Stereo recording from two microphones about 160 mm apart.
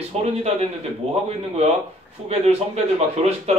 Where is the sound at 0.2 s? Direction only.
40° right (ahead or behind).